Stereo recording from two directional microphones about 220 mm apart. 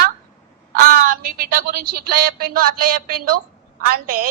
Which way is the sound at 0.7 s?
40° right (ahead or behind).